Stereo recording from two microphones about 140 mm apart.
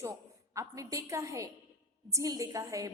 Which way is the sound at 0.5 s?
20° right (ahead or behind).